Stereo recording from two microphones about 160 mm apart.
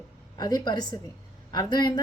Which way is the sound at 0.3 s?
25° left (ahead or behind).